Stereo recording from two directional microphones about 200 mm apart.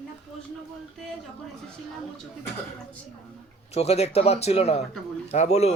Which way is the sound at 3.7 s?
30° left (ahead or behind).